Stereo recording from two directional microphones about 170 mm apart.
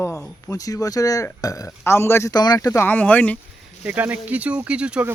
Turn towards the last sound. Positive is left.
turn(degrees=-5)  # may be behind; listen again after turning